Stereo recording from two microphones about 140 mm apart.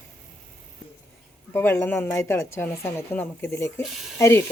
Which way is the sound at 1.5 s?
15° left (ahead or behind).